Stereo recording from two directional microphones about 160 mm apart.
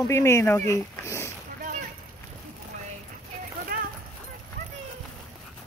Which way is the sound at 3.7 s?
65° right (ahead or behind).